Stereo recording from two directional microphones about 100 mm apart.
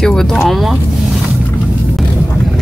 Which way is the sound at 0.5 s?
Centre (ahead or behind).